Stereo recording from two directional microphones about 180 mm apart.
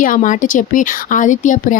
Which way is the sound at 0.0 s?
45° left (ahead or behind).